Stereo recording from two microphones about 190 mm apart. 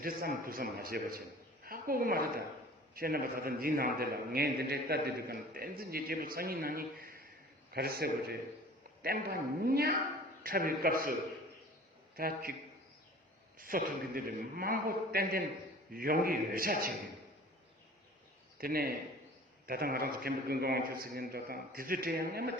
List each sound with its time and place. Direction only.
0.0 s a man's voice: 50° right (ahead or behind)
1.6 s a sound: 50° right (ahead or behind)
2.9 s a man's voice: 50° right (ahead or behind)
12.1 s a man's voice: 50° right (ahead or behind)
13.6 s a man's voice: 45° right (ahead or behind)
18.5 s a man's voice: 50° right (ahead or behind)